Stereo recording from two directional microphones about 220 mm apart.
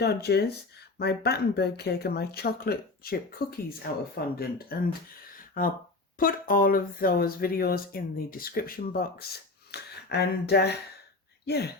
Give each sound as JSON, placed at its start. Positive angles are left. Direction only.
{"t": 0.0, "sound": "speech", "side_deg": 50}
{"t": 5.4, "sound": "a sound", "side_deg": 40}
{"t": 6.1, "sound": "speech", "side_deg": 40}